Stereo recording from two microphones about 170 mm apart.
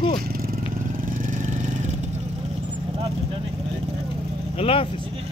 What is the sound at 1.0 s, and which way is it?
Vehicle, 50° right (ahead or behind).